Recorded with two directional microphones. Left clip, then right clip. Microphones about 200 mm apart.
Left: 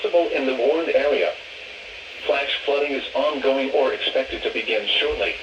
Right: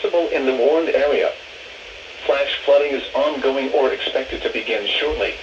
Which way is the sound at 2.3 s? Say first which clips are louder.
Right 3 dB; 60° right (ahead or behind).